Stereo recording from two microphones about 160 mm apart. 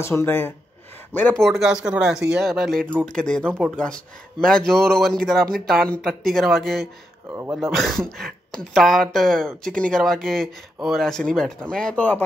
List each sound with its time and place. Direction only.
0.0 s speech: 15° left (ahead or behind)
7.2 s speech: 15° right (ahead or behind)
7.5 s speech: centre (ahead or behind)